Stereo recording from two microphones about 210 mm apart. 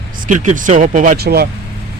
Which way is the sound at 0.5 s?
35° right (ahead or behind).